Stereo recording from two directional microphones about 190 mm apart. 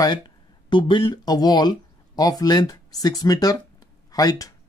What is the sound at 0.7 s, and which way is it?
A man's voice, 25° left (ahead or behind).